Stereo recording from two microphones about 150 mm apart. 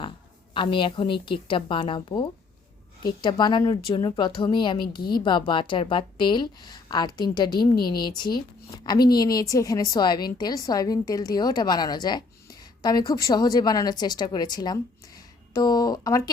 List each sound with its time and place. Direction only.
0.5 s a woman's voice: 35° left (ahead or behind)